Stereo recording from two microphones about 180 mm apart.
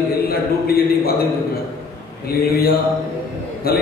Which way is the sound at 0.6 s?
60° left (ahead or behind).